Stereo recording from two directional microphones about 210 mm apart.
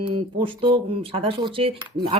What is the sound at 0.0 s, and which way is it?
Speech, 25° right (ahead or behind).